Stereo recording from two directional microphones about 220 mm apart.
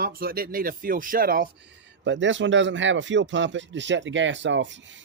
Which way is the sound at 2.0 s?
55° right (ahead or behind).